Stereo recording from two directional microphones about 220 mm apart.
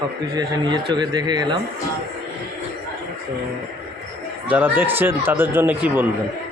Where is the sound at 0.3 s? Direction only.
20° right (ahead or behind).